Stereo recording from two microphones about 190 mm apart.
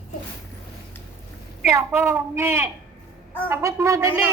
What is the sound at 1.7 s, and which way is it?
A woman's voice, 15° right (ahead or behind).